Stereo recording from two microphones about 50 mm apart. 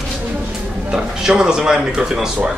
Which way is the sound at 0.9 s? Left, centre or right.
Centre.